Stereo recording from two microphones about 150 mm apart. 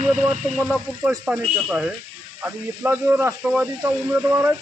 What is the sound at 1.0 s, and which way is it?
Speech, 5° right (ahead or behind).